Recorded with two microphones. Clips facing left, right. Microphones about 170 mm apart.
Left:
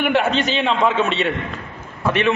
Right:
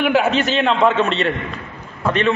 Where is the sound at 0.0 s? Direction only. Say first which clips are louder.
Right 2 dB; centre (ahead or behind).